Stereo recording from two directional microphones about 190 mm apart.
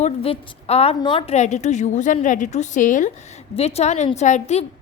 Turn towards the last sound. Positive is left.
turn(degrees=35)  # may be behind; listen again after turning